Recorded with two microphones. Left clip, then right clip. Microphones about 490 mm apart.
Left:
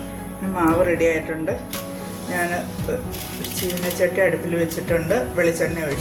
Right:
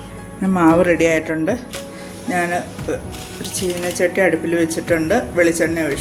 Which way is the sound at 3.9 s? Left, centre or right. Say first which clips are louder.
Right 3 dB; centre.